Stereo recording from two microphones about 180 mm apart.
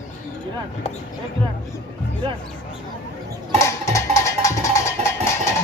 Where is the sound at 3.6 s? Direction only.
15° left (ahead or behind).